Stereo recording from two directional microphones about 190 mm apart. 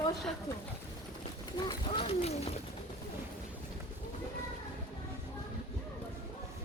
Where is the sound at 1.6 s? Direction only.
30° left (ahead or behind).